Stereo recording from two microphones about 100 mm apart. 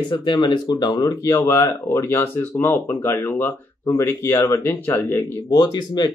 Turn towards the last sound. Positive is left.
turn(degrees=45)  # may be behind; listen again after turning